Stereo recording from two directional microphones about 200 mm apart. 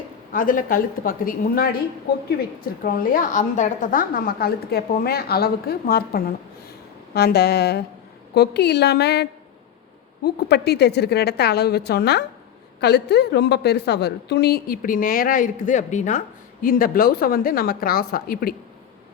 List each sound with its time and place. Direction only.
0.3 s a woman's voice: 45° left (ahead or behind)
2.8 s a woman's voice: 45° left (ahead or behind)
10.2 s a woman's voice: 55° left (ahead or behind)